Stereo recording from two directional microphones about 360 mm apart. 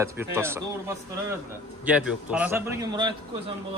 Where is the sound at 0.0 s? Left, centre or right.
Centre.